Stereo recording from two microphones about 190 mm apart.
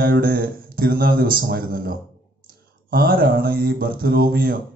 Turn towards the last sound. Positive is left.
turn(degrees=-50)  # may be behind; listen again after turning